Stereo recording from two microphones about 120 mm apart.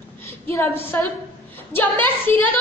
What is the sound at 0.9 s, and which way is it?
A woman's voice, 20° left (ahead or behind).